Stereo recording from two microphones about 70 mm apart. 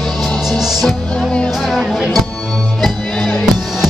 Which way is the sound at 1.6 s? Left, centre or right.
Centre.